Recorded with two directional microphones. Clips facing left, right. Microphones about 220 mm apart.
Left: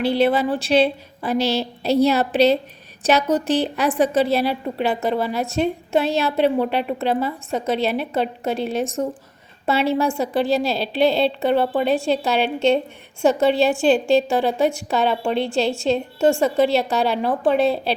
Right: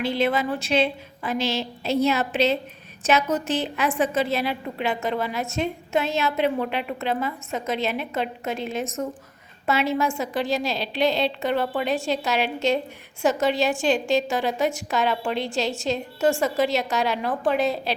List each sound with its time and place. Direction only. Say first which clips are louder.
0.0 s a woman's voice: left 5 dB; 35° left (ahead or behind)